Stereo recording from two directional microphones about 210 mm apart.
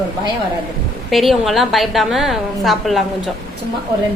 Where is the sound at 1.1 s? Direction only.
Centre (ahead or behind).